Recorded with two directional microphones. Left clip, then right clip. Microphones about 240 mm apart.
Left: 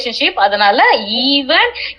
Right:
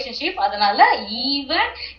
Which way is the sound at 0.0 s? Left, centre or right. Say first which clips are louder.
Left 9 dB; left.